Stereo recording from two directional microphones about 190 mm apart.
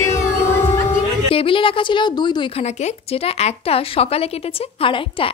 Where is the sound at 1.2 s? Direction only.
30° left (ahead or behind).